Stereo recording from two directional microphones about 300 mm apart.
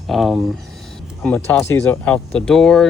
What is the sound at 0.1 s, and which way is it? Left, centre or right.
Speech, centre.